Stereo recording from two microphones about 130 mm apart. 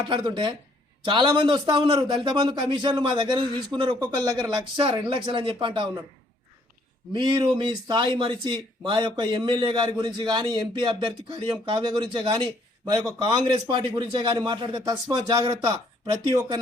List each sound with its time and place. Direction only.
0.0 s a man's voice: 35° right (ahead or behind)
7.1 s a man's voice: 40° right (ahead or behind)